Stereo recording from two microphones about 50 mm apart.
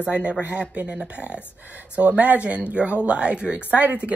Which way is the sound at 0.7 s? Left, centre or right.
Right.